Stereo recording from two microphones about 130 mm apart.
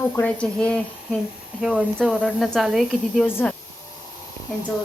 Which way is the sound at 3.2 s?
15° left (ahead or behind).